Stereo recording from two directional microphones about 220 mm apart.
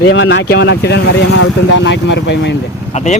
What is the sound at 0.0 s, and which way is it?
Speech, 55° left (ahead or behind).